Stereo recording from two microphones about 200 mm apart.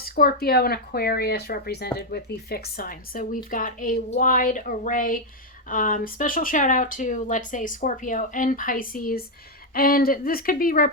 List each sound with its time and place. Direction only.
0.0 s speech: 50° left (ahead or behind)